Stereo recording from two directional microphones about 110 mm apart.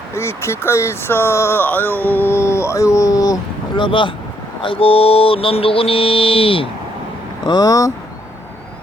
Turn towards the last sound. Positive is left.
turn(degrees=30)  # may be behind; listen again after turning